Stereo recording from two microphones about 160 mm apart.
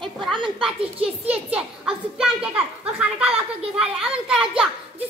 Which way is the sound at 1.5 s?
5° right (ahead or behind).